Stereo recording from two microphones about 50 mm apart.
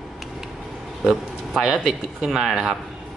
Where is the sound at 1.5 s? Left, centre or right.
Centre.